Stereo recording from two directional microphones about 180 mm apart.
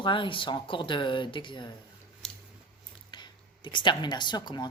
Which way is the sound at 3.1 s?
25° left (ahead or behind).